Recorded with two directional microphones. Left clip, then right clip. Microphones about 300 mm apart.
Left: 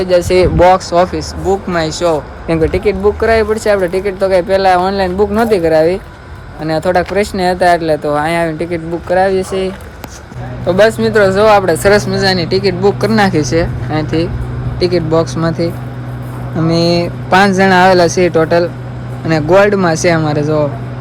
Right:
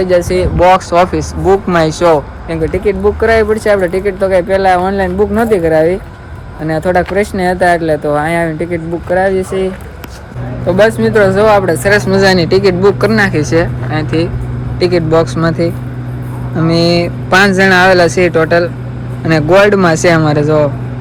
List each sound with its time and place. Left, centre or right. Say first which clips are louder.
0.0 s speech: right 1 dB; centre
0.3 s speech: left 2 dB; left
0.7 s speech: right 2 dB; centre
2.1 s speech: even; centre
2.8 s speech: right 1 dB; centre
10.7 s speech: even; centre
11.7 s speech: left 1 dB; centre
12.0 s speech: right 4 dB; centre